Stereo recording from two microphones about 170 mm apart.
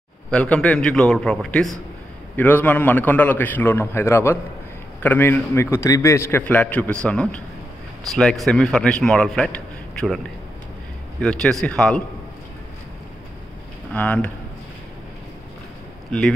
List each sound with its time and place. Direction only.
0.3 s a man's voice: 5° left (ahead or behind)
13.9 s a man's voice: 10° left (ahead or behind)
16.1 s a man's voice: 5° left (ahead or behind)